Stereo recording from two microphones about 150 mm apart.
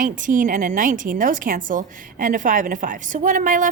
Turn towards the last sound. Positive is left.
turn(degrees=-60)  # may be behind; listen again after turning